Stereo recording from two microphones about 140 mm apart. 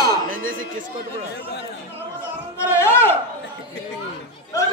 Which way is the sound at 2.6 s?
20° left (ahead or behind).